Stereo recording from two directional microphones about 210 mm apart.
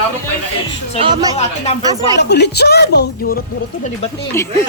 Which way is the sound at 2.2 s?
55° left (ahead or behind).